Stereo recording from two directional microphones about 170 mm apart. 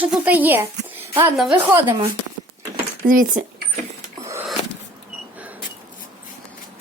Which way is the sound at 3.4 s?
5° right (ahead or behind).